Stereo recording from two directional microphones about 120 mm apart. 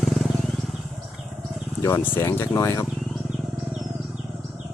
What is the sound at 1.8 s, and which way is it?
Speech, 25° left (ahead or behind).